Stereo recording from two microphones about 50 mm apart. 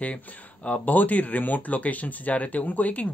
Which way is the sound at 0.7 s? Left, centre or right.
Left.